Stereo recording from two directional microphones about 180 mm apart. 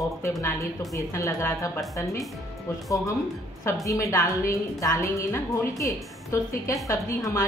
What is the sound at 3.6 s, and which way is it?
A woman's voice, 15° left (ahead or behind).